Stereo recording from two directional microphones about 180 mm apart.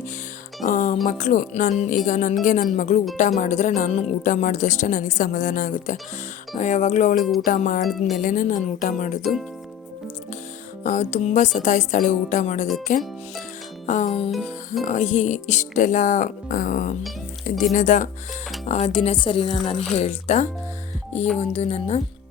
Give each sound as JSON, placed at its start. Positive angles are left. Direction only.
{"t": 0.6, "sound": "music", "side_deg": 45}
{"t": 1.0, "sound": "speech", "side_deg": 45}
{"t": 7.2, "sound": "speech", "side_deg": 0}
{"t": 7.4, "sound": "speech", "side_deg": 45}
{"t": 7.9, "sound": "speech", "side_deg": 0}
{"t": 8.1, "sound": "speech", "side_deg": 45}
{"t": 10.8, "sound": "speech", "side_deg": 40}
{"t": 14.3, "sound": "music", "side_deg": 0}
{"t": 14.8, "sound": "speech", "side_deg": 40}
{"t": 17.5, "sound": "speech", "side_deg": 0}
{"t": 17.7, "sound": "speech", "side_deg": 45}